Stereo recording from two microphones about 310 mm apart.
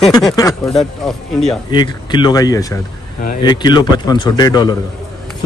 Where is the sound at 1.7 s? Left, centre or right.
Centre.